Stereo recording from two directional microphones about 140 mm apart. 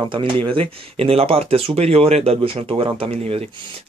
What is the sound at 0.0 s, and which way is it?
Speech, 35° right (ahead or behind).